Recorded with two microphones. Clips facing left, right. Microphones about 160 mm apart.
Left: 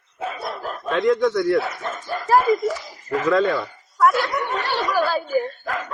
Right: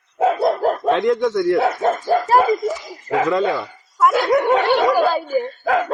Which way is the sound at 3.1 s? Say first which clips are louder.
Right 5 dB; 90° right.